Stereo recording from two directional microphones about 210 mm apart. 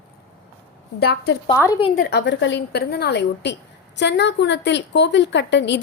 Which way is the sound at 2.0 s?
50° left (ahead or behind).